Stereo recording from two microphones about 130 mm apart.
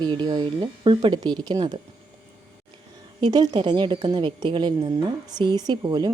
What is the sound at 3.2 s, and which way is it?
A woman's voice, 35° right (ahead or behind).